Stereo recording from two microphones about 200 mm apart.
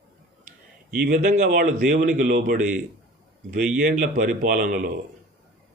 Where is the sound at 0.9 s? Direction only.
50° right (ahead or behind).